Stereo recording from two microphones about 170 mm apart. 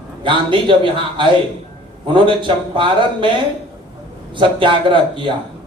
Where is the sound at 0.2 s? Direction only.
30° right (ahead or behind).